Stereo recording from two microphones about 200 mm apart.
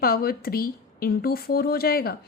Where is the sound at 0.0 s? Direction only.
50° left (ahead or behind).